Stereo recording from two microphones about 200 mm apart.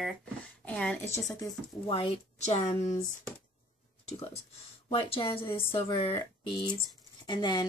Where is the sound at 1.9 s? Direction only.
30° left (ahead or behind).